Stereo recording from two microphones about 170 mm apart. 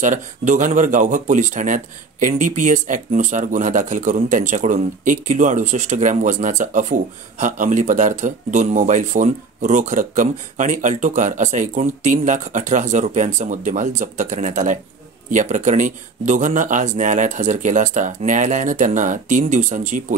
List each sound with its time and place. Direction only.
0.0 s speech: 50° right (ahead or behind)